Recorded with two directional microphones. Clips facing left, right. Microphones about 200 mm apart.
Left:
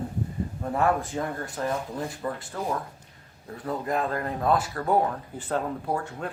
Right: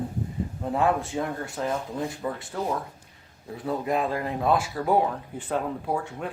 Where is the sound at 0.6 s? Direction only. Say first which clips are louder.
Right 1 dB; 15° right (ahead or behind).